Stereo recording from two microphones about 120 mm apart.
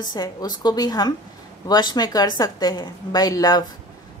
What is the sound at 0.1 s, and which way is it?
A woman's voice, 35° left (ahead or behind).